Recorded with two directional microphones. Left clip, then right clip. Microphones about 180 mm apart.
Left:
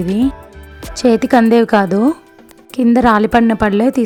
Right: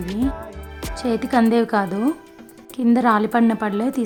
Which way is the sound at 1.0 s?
40° left (ahead or behind).